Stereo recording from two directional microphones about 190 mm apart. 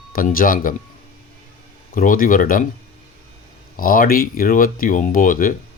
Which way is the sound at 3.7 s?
45° left (ahead or behind).